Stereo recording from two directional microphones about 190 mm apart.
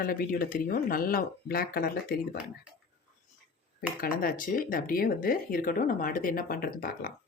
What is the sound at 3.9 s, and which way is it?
Speech, 50° left (ahead or behind).